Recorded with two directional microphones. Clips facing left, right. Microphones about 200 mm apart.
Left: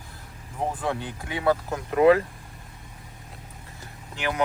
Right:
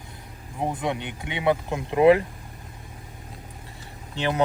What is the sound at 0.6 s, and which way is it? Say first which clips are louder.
Speech: right 1 dB; 15° right (ahead or behind).